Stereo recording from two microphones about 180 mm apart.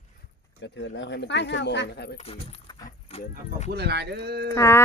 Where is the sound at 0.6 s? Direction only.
90° left; by 2.1 s 70° left (ahead or behind).